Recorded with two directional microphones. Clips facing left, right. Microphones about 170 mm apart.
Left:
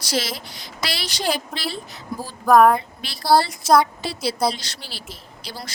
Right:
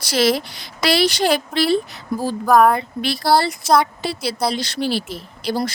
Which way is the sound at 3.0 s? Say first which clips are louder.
Right 1 dB; 65° right (ahead or behind).